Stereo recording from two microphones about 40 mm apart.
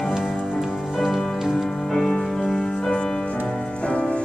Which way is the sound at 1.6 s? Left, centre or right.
Centre.